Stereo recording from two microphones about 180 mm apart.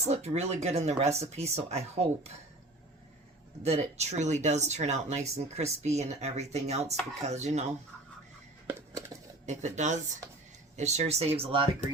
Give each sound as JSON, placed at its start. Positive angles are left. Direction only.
{"t": 0.0, "sound": "speech", "side_deg": -40}
{"t": 3.6, "sound": "speech", "side_deg": -35}
{"t": 8.9, "sound": "a sound", "side_deg": -15}
{"t": 9.5, "sound": "speech", "side_deg": -40}